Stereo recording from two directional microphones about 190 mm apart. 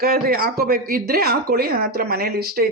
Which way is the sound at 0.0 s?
50° right (ahead or behind).